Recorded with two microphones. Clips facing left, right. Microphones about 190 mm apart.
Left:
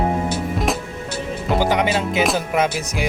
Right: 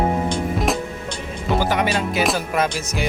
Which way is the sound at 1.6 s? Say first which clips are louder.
Left 3 dB; 20° left (ahead or behind).